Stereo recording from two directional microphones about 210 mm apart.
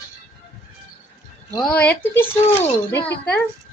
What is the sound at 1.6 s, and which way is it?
Speech, 5° left (ahead or behind).